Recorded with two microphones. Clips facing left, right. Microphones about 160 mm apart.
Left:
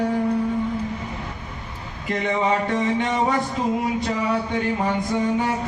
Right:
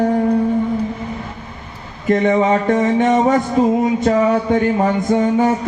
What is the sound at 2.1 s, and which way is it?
Music, 45° right (ahead or behind).